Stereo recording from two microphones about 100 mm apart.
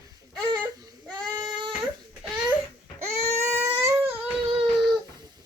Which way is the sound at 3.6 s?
20° right (ahead or behind).